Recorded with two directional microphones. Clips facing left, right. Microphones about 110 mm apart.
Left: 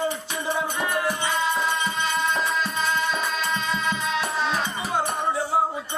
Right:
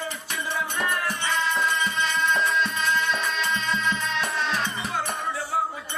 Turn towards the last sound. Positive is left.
turn(degrees=25)  # may be behind; listen again after turning